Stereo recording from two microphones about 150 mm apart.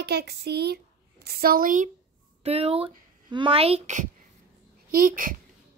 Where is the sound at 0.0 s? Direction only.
90° right; by 1.9 s 65° right (ahead or behind).